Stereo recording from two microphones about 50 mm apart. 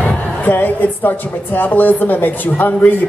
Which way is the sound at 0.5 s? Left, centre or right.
Left.